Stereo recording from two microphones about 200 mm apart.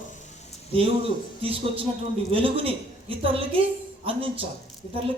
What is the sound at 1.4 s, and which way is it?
A woman's voice, 25° right (ahead or behind).